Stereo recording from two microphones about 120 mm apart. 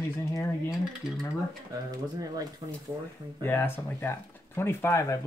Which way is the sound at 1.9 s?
30° right (ahead or behind).